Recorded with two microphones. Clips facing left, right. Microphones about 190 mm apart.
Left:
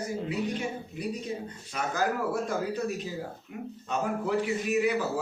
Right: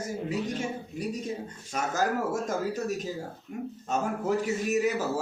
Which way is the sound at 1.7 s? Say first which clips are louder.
Right 1 dB; 45° right (ahead or behind).